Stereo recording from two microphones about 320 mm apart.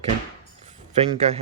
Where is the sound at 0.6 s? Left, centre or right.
Centre.